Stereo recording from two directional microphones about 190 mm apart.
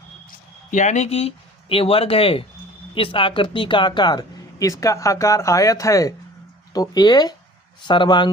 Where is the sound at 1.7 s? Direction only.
30° left (ahead or behind).